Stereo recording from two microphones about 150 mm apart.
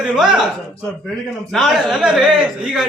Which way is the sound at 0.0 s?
5° right (ahead or behind).